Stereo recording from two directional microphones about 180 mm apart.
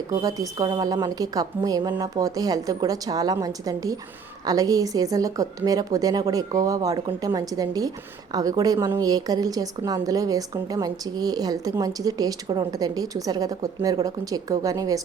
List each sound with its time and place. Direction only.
0.1 s a woman's voice: 20° right (ahead or behind)